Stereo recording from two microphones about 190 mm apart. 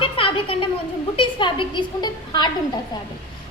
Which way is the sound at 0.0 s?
30° left (ahead or behind).